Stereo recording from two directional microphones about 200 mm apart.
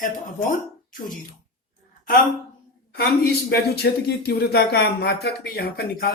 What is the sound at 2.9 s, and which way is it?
Speech, 50° left (ahead or behind).